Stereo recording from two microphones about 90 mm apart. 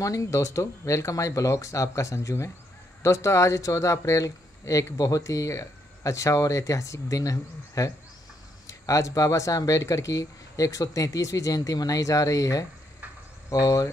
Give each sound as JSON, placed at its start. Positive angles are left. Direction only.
{"t": 0.0, "sound": "speech", "side_deg": 35}